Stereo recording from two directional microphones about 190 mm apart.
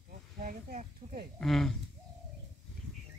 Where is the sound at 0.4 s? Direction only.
50° right (ahead or behind).